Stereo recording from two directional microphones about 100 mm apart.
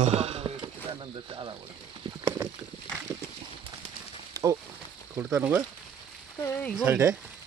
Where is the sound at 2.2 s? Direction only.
25° right (ahead or behind).